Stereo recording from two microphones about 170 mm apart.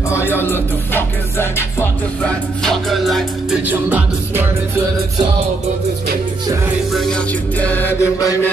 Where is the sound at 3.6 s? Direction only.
10° right (ahead or behind).